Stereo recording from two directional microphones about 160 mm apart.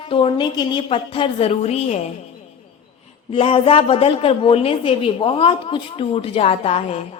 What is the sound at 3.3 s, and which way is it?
A woman's voice, 35° left (ahead or behind).